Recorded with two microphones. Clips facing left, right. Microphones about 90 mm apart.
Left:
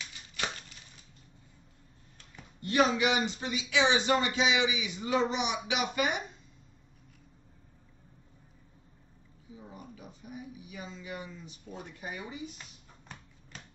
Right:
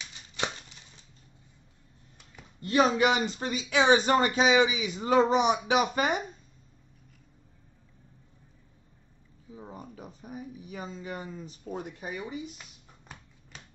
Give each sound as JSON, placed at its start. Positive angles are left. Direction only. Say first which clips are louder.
{"t": 0.0, "sound": "a sound", "louder": "right 3 dB", "side_deg": -20}
{"t": 2.6, "sound": "speech", "louder": "right 3 dB", "side_deg": -35}
{"t": 9.6, "sound": "speech", "louder": "right 5 dB", "side_deg": -35}